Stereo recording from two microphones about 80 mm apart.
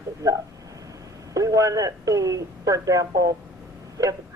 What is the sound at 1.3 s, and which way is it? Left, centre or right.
Speech, right.